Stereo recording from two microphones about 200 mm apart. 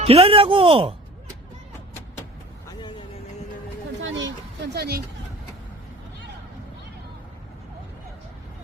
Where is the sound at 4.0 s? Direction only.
65° right (ahead or behind).